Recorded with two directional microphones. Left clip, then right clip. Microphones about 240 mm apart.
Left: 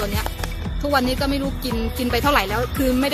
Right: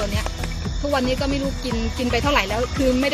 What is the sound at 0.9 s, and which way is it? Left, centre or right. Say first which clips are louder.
Speech: left 2 dB; centre.